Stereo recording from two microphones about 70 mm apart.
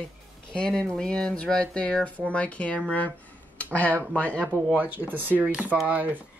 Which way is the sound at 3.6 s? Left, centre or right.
Left.